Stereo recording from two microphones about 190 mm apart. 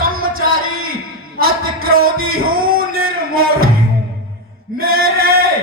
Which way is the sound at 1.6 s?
50° right (ahead or behind).